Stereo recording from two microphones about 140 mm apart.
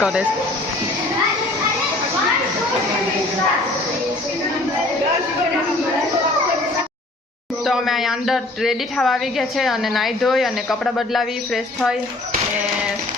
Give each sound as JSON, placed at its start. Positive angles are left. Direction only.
{"t": 0.0, "sound": "a woman's voice", "side_deg": -5}
{"t": 7.6, "sound": "a woman's voice", "side_deg": 0}